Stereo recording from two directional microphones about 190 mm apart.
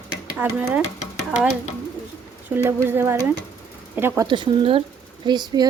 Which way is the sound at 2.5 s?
10° right (ahead or behind).